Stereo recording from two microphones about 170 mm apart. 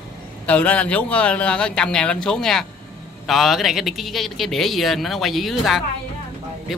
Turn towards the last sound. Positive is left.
turn(degrees=0)  # may be behind; listen again after turning